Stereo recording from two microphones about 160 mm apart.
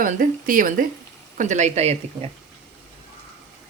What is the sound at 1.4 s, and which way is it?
Speech, 50° right (ahead or behind).